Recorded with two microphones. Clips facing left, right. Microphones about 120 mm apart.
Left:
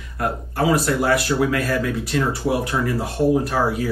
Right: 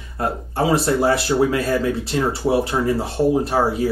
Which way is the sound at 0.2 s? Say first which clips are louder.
Right 1 dB; 25° right (ahead or behind).